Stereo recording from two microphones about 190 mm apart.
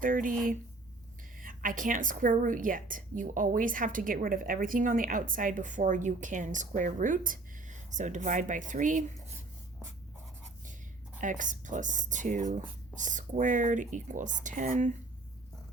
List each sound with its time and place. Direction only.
0.0 s a woman's voice: 45° right (ahead or behind)
1.4 s a woman's voice: 45° right (ahead or behind)
11.2 s speech: 40° right (ahead or behind)